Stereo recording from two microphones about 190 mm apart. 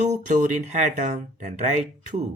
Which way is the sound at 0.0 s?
40° right (ahead or behind).